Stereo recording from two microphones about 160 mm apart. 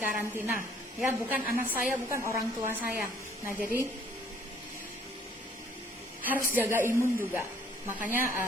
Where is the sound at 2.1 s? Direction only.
15° right (ahead or behind).